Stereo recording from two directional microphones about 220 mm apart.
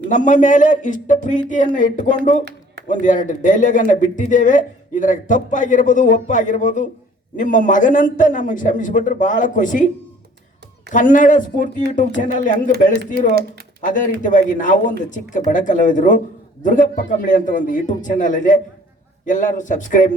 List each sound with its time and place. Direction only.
0.1 s speech: 35° left (ahead or behind)
10.9 s speech: 35° left (ahead or behind)
13.8 s speech: 35° left (ahead or behind)